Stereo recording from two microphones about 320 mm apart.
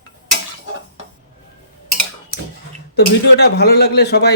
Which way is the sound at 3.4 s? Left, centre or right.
Left.